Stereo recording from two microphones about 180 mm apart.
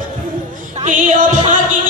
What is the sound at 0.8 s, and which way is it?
Music, 45° right (ahead or behind).